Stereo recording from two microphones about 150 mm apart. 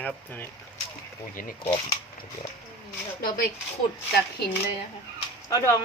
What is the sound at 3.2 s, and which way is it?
Speech, 70° left (ahead or behind).